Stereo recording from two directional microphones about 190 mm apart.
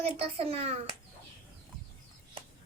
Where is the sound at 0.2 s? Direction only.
30° right (ahead or behind).